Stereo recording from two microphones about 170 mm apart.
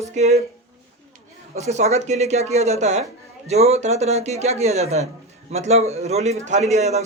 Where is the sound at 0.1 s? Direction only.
40° right (ahead or behind).